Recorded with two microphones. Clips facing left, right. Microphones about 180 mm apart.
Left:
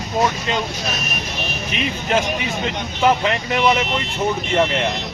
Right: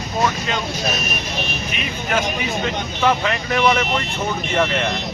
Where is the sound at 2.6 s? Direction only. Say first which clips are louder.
Left 2 dB; 20° left (ahead or behind).